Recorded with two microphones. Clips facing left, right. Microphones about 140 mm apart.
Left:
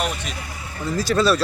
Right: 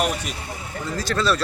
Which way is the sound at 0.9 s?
10° left (ahead or behind).